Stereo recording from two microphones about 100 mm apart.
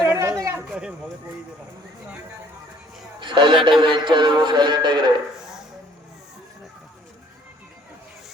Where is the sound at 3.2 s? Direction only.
50° right (ahead or behind).